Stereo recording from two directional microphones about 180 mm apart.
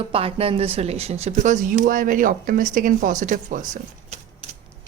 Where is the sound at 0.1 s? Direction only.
30° right (ahead or behind); by 3.6 s 45° right (ahead or behind).